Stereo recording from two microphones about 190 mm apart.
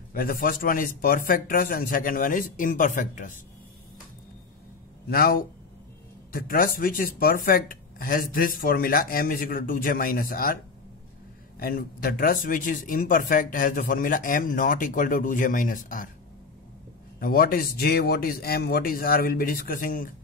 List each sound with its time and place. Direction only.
0.1 s speech: 50° left (ahead or behind)
5.1 s speech: 50° left (ahead or behind)
11.6 s speech: 50° left (ahead or behind)
17.2 s speech: 50° left (ahead or behind)